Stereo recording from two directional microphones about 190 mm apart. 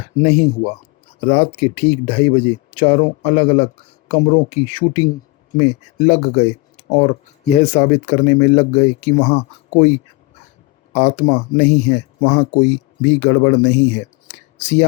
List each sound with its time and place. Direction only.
0.0 s speech: 35° left (ahead or behind)
10.9 s speech: 35° left (ahead or behind)